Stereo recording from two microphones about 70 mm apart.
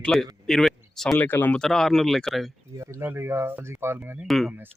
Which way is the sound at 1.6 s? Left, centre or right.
Centre.